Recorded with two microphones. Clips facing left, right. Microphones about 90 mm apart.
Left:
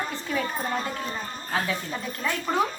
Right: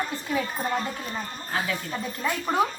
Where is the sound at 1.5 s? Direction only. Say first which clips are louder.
Left 1 dB; centre (ahead or behind).